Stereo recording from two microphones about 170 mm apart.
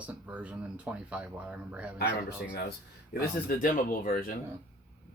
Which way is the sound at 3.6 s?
55° left (ahead or behind).